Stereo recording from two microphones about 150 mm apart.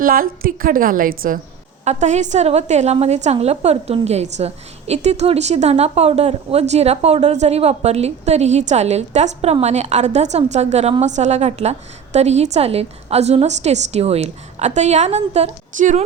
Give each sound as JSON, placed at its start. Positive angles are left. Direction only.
{"t": 0.0, "sound": "a woman's voice", "side_deg": -70}
{"t": 1.8, "sound": "a woman's voice", "side_deg": -50}